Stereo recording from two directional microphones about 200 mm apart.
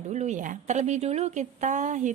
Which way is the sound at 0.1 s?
35° right (ahead or behind).